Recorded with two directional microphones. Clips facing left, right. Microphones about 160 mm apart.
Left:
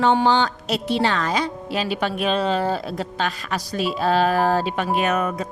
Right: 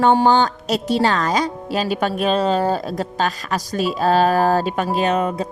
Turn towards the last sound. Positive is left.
turn(degrees=-30)  # may be behind; listen again after turning